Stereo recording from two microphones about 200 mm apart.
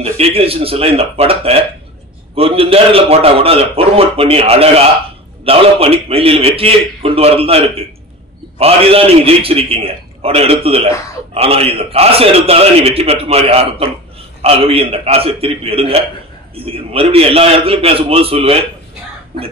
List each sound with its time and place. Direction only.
0.0 s a man's voice: 30° right (ahead or behind)